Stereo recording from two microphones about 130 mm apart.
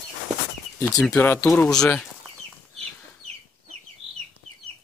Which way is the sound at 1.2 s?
15° left (ahead or behind).